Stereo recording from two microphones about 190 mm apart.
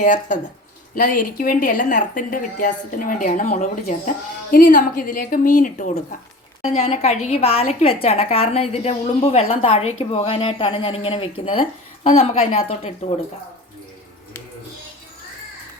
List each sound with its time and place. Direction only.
0.0 s a woman's voice: 40° left (ahead or behind)
6.6 s a woman's voice: 30° left (ahead or behind)